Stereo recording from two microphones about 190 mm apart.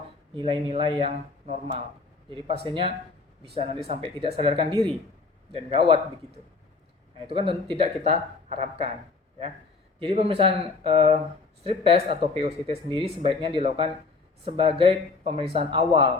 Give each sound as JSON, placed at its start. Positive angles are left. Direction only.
{"t": 0.3, "sound": "speech", "side_deg": -25}
{"t": 7.3, "sound": "speech", "side_deg": -30}
{"t": 10.0, "sound": "speech", "side_deg": -30}